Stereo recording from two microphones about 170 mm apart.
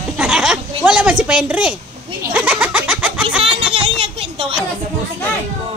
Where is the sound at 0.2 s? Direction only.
5° right (ahead or behind).